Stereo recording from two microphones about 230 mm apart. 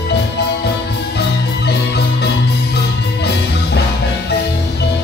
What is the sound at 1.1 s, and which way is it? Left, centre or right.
Music, left.